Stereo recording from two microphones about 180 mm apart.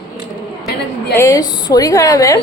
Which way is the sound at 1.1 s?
20° left (ahead or behind).